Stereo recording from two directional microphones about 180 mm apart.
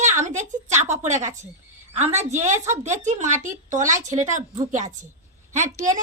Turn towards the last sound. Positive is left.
turn(degrees=-45)  # may be behind; listen again after turning